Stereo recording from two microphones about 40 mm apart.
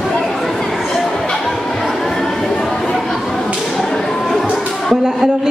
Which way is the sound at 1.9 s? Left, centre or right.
Centre.